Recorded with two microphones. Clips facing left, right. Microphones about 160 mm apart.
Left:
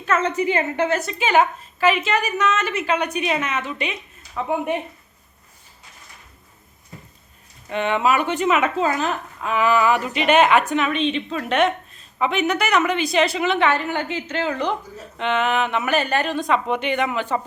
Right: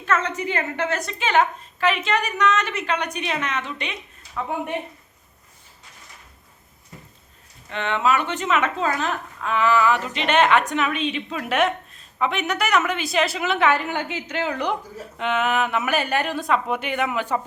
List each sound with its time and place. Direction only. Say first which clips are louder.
0.1 s a woman's voice: left 4 dB; 5° left (ahead or behind)
7.7 s a woman's voice: left 2 dB; 15° left (ahead or behind); by 17.4 s 5° right (ahead or behind)